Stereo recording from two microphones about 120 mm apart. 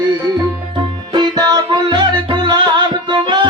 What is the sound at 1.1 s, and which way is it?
Music, 35° right (ahead or behind).